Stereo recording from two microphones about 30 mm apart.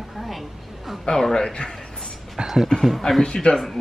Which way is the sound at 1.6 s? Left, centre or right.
Centre.